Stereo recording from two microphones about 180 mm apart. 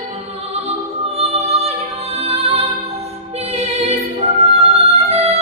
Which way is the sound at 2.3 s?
35° right (ahead or behind).